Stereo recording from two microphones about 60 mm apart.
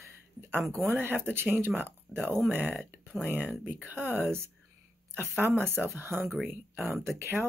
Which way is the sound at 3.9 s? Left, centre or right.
Right.